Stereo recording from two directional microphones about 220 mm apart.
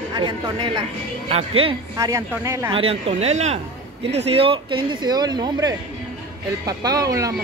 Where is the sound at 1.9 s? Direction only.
15° right (ahead or behind).